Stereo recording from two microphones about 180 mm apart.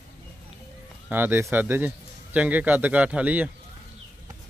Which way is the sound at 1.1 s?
10° right (ahead or behind).